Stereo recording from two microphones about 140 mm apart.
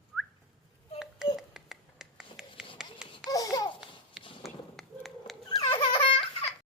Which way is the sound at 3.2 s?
25° left (ahead or behind).